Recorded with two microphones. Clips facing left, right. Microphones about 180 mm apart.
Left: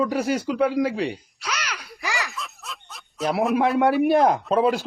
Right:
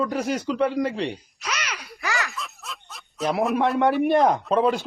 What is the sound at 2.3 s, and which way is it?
Speech, centre (ahead or behind).